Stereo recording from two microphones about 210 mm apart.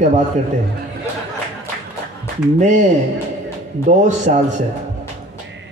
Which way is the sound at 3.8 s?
35° right (ahead or behind).